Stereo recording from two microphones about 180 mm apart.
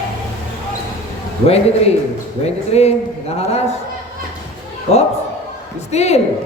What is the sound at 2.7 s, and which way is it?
A man's voice, 35° left (ahead or behind).